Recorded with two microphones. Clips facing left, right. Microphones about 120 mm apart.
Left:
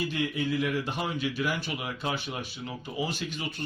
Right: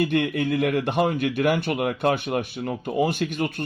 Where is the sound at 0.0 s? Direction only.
60° right (ahead or behind).